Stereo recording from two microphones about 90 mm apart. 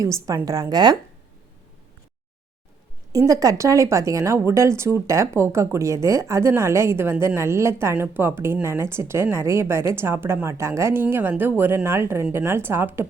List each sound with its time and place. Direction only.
0.0 s speech: 40° right (ahead or behind)
3.1 s a woman's voice: 40° right (ahead or behind)